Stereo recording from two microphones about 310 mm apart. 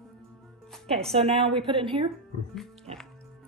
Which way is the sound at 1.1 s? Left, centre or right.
Centre.